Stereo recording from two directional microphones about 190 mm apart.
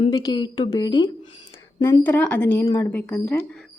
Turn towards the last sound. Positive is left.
turn(degrees=5)  # may be behind; listen again after turning